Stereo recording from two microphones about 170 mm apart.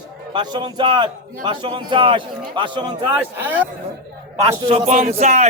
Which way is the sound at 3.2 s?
10° right (ahead or behind).